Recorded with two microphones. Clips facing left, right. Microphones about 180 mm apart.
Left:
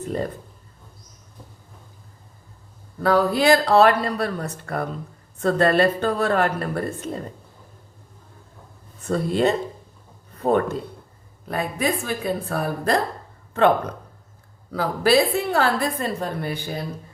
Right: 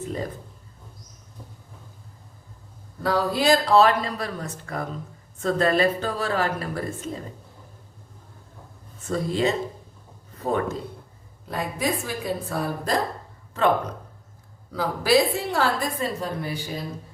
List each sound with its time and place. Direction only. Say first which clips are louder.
3.0 s speech: left 4 dB; 60° left (ahead or behind)
9.0 s speech: left 3 dB; 60° left (ahead or behind)